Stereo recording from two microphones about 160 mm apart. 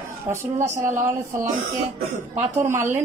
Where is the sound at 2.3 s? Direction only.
45° right (ahead or behind).